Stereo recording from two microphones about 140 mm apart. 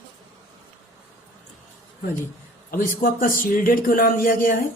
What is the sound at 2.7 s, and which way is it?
A man's voice, 75° left (ahead or behind).